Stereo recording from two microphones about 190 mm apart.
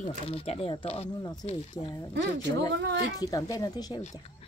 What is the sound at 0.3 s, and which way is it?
Speech, 30° left (ahead or behind).